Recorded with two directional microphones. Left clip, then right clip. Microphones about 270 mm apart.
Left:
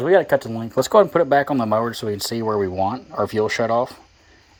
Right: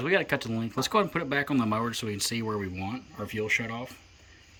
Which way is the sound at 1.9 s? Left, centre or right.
Centre.